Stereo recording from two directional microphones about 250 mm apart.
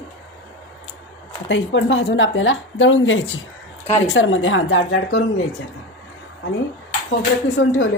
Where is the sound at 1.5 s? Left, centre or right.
Left.